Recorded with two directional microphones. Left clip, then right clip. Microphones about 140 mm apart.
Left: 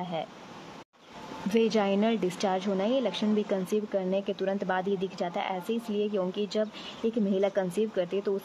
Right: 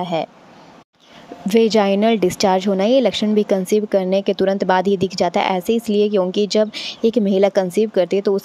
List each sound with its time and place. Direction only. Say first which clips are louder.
0.0 s speech: right 13 dB; 40° right (ahead or behind)
1.5 s a woman's voice: right 11 dB; 35° right (ahead or behind)